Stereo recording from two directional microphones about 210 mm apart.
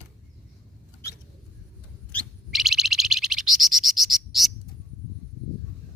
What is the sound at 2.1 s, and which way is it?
Bird, centre (ahead or behind).